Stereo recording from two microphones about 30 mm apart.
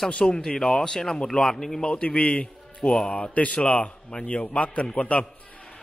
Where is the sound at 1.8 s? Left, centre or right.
Left.